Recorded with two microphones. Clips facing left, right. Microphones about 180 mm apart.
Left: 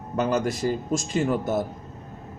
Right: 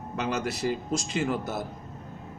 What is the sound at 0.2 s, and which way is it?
A man's voice, 45° left (ahead or behind).